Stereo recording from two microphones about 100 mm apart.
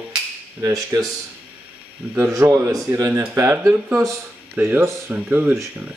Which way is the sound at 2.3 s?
35° right (ahead or behind).